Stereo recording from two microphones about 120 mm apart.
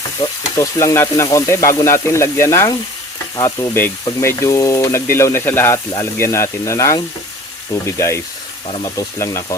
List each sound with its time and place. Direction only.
0.2 s speech: 25° left (ahead or behind)
3.8 s speech: 20° left (ahead or behind)